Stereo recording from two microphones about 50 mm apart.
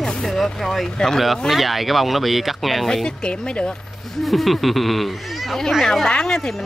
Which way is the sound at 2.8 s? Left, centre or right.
Centre.